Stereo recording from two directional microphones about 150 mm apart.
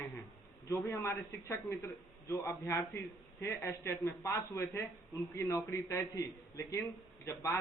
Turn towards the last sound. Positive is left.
turn(degrees=15)  # may be behind; listen again after turning